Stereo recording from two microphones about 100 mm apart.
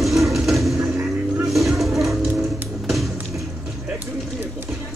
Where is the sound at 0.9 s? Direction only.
25° right (ahead or behind).